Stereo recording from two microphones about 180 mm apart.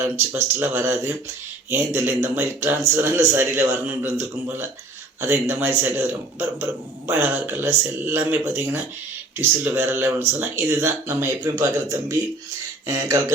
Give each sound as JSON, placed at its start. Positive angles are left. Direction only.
{"t": 0.0, "sound": "a man's voice", "side_deg": -10}
{"t": 7.1, "sound": "a man's voice", "side_deg": -10}